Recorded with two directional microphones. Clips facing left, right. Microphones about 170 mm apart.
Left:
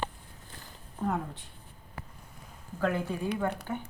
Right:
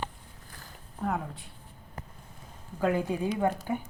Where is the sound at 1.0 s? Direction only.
10° right (ahead or behind).